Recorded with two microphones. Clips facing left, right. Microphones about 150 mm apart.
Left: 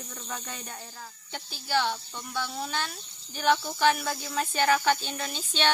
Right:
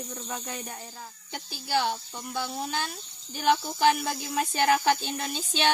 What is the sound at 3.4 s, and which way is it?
Speech, 20° right (ahead or behind).